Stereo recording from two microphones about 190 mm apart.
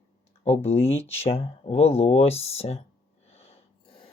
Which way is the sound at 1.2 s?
30° left (ahead or behind).